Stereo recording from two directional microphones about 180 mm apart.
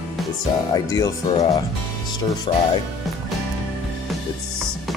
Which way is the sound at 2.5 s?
25° left (ahead or behind).